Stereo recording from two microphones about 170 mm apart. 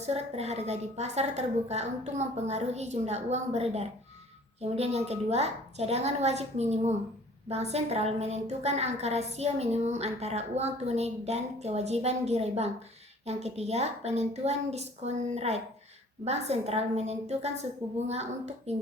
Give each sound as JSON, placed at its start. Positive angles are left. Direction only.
{"t": 0.0, "sound": "a woman's voice", "side_deg": -40}